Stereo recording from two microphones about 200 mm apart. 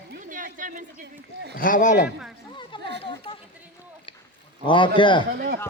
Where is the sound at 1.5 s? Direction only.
45° left (ahead or behind).